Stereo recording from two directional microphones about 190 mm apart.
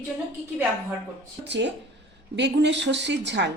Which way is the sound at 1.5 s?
65° right (ahead or behind).